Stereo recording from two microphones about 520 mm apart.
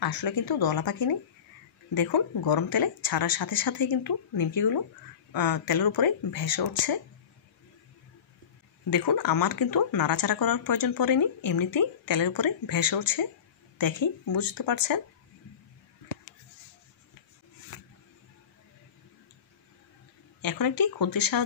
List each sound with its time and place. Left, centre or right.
0.0 s speech: left
8.9 s speech: left
20.4 s speech: left